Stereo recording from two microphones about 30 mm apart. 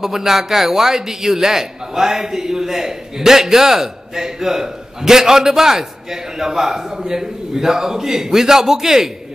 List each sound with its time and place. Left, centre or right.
0.0 s a man's voice: centre